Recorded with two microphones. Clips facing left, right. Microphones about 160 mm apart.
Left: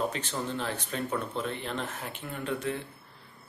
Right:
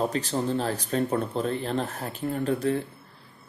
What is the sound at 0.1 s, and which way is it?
Speech, 35° right (ahead or behind).